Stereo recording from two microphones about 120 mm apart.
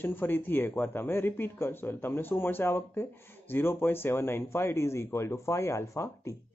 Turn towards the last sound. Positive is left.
turn(degrees=25)  # may be behind; listen again after turning